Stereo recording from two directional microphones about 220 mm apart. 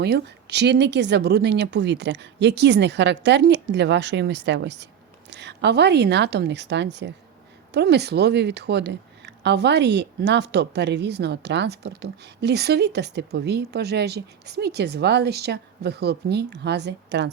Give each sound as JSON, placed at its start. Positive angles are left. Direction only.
{"t": 0.0, "sound": "speech", "side_deg": -50}